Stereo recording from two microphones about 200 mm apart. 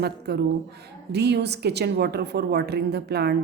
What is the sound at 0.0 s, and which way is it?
A woman's voice, 55° right (ahead or behind).